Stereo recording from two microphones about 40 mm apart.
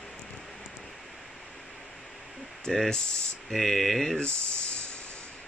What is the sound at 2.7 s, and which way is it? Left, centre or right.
Speech, left.